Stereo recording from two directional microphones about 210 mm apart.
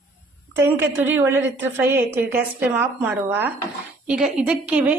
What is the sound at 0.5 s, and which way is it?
A woman's voice, 10° right (ahead or behind).